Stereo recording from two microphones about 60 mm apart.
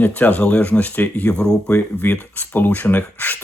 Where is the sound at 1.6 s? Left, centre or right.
Left.